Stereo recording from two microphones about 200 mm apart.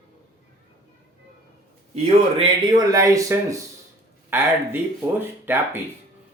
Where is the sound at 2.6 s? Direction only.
20° right (ahead or behind).